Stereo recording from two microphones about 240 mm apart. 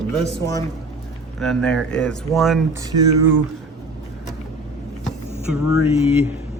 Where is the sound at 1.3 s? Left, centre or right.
Centre.